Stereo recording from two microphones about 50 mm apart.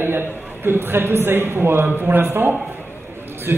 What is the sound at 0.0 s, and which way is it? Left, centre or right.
A man's voice, right.